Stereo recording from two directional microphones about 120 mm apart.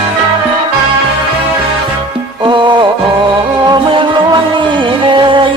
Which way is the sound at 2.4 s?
40° right (ahead or behind).